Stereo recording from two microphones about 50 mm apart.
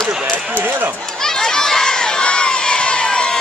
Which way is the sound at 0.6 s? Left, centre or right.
Right.